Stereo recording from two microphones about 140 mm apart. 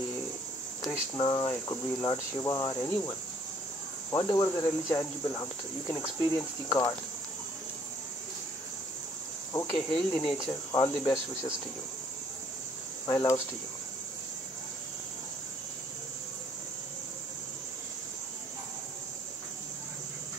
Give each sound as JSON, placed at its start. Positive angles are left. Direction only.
{"t": 0.8, "sound": "speech", "side_deg": 30}
{"t": 9.5, "sound": "cricket", "side_deg": 20}
{"t": 9.8, "sound": "speech", "side_deg": 5}
{"t": 10.7, "sound": "speech", "side_deg": 25}
{"t": 13.0, "sound": "speech", "side_deg": 25}